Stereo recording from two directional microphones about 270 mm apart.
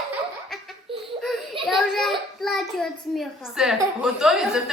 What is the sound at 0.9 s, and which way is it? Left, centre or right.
Laughter, centre.